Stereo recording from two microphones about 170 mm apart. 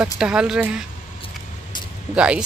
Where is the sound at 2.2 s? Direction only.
5° right (ahead or behind).